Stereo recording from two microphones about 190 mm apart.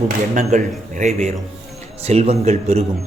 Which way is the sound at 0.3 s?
40° right (ahead or behind).